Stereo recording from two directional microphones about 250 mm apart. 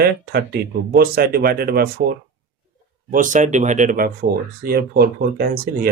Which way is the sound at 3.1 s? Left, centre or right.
Right.